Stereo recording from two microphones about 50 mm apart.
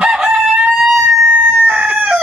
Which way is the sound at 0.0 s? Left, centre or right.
Centre.